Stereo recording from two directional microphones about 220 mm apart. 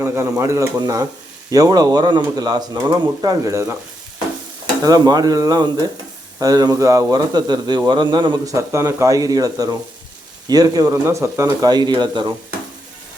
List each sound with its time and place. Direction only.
0.0 s speech: 10° right (ahead or behind)
4.8 s speech: 15° right (ahead or behind)